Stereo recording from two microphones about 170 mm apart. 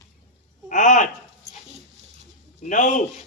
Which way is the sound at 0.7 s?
50° left (ahead or behind).